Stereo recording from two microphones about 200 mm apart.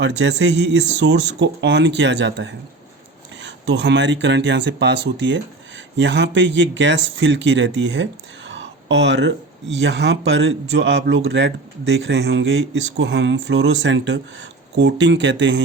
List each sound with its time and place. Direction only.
0.0 s speech: 60° right (ahead or behind)